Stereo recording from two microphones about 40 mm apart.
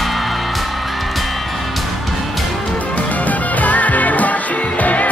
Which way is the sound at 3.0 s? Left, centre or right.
Left.